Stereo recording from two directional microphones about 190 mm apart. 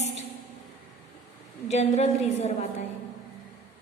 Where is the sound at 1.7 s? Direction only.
35° left (ahead or behind).